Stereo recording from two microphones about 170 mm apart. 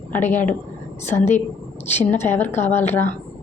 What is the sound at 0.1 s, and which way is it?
Speech, 10° left (ahead or behind).